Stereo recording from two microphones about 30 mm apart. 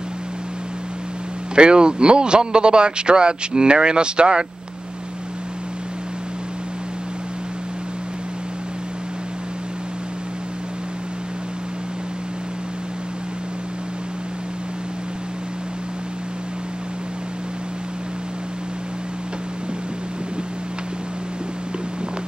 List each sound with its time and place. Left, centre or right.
1.5 s a man's voice: right